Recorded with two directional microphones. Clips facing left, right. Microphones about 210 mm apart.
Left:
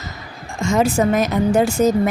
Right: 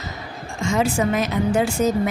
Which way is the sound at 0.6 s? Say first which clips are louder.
Left 4 dB; 45° left (ahead or behind).